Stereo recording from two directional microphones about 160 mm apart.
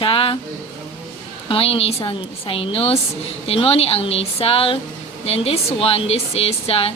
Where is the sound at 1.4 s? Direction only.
35° left (ahead or behind).